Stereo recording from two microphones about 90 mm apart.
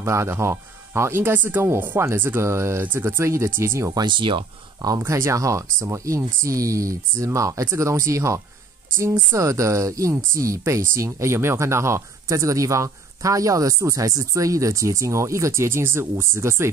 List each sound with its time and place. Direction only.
0.0 s speech: 35° right (ahead or behind)
3.9 s speech: 60° right (ahead or behind)
4.8 s speech: 40° right (ahead or behind)